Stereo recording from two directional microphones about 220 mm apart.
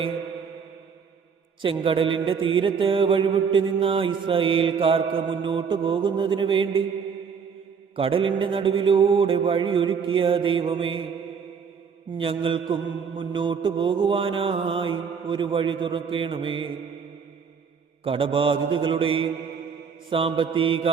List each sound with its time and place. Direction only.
1.6 s mantra: 25° right (ahead or behind)
7.9 s mantra: 25° right (ahead or behind)
12.1 s mantra: 25° right (ahead or behind)
18.0 s mantra: 25° right (ahead or behind)